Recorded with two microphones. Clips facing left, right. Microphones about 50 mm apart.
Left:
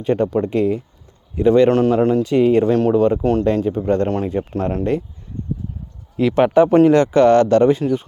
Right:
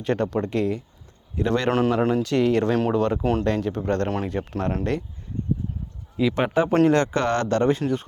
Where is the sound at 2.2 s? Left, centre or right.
Centre.